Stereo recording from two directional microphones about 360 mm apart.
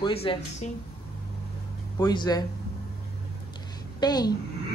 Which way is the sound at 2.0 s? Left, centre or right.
Centre.